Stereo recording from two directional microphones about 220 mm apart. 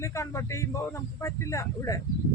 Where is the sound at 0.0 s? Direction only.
15° left (ahead or behind).